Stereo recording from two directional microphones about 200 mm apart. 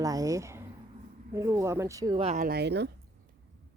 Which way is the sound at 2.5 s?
55° right (ahead or behind).